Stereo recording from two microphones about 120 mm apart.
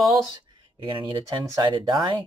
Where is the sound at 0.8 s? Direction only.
40° right (ahead or behind).